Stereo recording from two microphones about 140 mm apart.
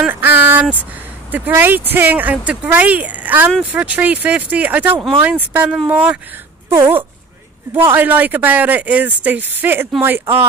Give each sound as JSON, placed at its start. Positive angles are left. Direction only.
{"t": 0.0, "sound": "speech", "side_deg": -15}